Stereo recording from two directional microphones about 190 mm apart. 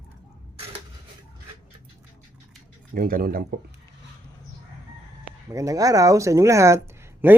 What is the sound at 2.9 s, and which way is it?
Speech, 50° right (ahead or behind).